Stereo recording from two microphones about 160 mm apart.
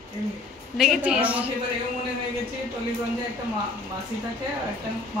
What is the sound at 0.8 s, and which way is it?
Speech, 5° right (ahead or behind).